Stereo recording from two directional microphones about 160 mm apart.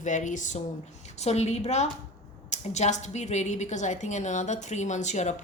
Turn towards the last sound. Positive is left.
turn(degrees=45)  # may be behind; listen again after turning